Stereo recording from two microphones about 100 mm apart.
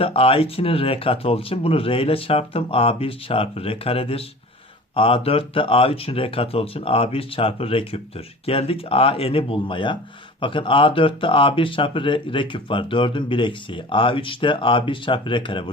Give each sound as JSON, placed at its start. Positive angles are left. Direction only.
{"t": 0.0, "sound": "speech", "side_deg": 70}